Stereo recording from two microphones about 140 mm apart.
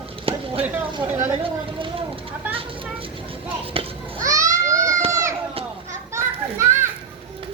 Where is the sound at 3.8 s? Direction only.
40° right (ahead or behind).